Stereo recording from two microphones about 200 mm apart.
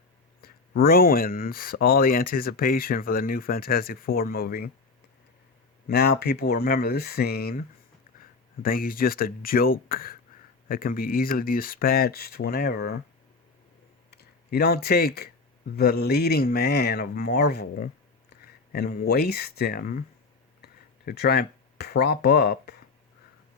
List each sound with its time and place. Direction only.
0.4 s speech: 50° left (ahead or behind)
5.9 s speech: 50° left (ahead or behind)
8.6 s speech: 45° left (ahead or behind)
14.1 s speech: 55° left (ahead or behind)